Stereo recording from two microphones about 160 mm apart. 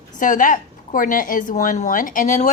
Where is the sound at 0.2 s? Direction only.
55° left (ahead or behind).